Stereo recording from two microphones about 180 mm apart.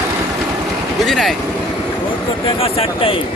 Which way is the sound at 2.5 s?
30° left (ahead or behind).